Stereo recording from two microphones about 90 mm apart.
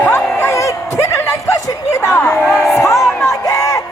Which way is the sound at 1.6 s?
35° left (ahead or behind).